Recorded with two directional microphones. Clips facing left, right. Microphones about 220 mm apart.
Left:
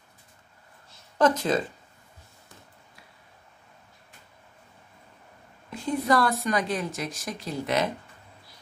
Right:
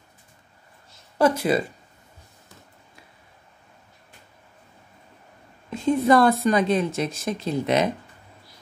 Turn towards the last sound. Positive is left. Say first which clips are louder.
# right 5 dB
turn(degrees=-20)  # may be behind; listen again after turning